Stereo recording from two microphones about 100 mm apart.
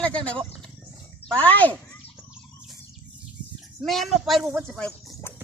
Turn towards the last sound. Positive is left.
turn(degrees=10)  # may be behind; listen again after turning